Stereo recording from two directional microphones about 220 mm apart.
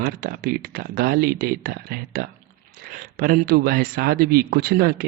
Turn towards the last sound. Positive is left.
turn(degrees=-45)  # may be behind; listen again after turning